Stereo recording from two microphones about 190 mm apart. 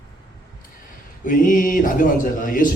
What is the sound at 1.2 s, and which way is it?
A man's voice, 45° left (ahead or behind).